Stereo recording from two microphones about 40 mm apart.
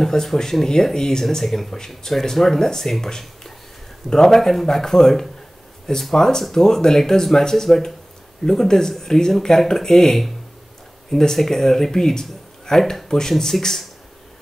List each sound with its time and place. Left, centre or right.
0.0 s speech: centre